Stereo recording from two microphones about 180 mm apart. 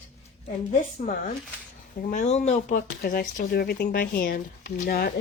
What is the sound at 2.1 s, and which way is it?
Speech, 40° left (ahead or behind).